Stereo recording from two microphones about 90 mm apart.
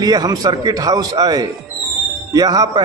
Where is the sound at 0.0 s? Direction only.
45° right (ahead or behind).